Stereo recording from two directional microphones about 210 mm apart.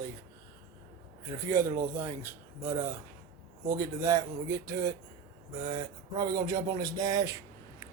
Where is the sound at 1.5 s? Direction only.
15° right (ahead or behind).